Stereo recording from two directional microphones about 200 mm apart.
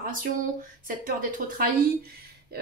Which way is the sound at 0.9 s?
40° right (ahead or behind).